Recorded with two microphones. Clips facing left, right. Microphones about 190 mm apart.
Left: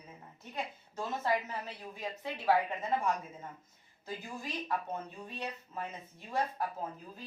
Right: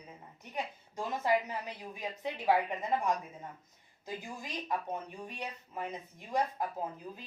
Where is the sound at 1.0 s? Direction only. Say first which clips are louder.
Right 2 dB; 15° right (ahead or behind).